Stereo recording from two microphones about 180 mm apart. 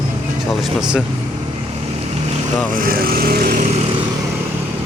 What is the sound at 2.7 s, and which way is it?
Speech, 55° right (ahead or behind).